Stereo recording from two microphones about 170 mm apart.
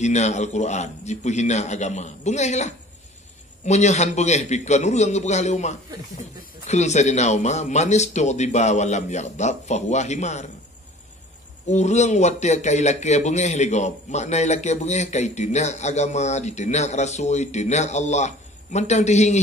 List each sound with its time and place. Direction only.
0.0 s a man's voice: 40° left (ahead or behind)
11.7 s a man's voice: 40° left (ahead or behind)